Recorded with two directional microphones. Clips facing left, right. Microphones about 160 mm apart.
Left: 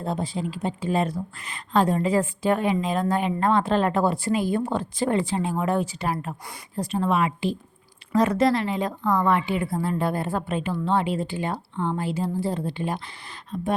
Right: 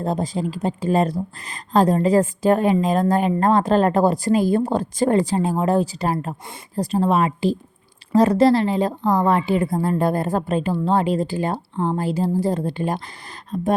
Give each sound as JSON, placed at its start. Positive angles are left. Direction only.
{"t": 0.0, "sound": "a woman's voice", "side_deg": -40}